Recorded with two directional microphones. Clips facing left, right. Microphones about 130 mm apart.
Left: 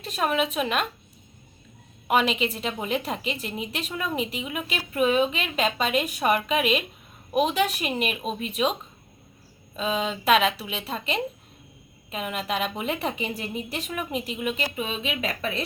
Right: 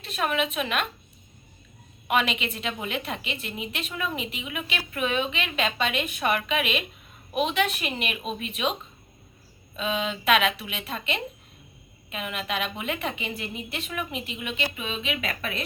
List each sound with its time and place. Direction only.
0.0 s a woman's voice: 40° left (ahead or behind)
2.0 s a woman's voice: 35° left (ahead or behind)
9.7 s a woman's voice: 35° left (ahead or behind)